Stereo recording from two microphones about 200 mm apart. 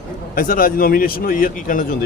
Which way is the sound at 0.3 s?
45° left (ahead or behind).